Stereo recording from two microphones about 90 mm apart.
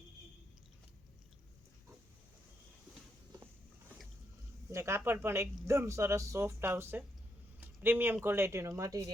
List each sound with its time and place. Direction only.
4.7 s speech: 30° right (ahead or behind)